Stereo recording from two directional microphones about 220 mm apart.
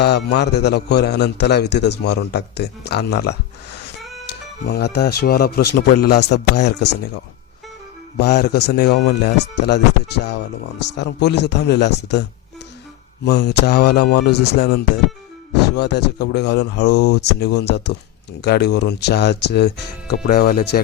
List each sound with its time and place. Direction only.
0.0 s a man's voice: 50° left (ahead or behind)
4.6 s a man's voice: 50° left (ahead or behind)
8.2 s a man's voice: 50° left (ahead or behind)
13.2 s a man's voice: 50° left (ahead or behind)